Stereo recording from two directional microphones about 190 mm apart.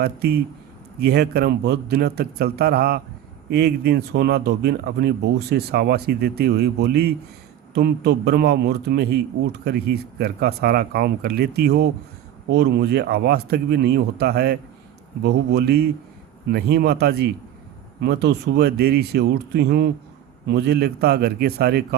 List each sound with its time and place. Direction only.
0.0 s speech: 55° right (ahead or behind)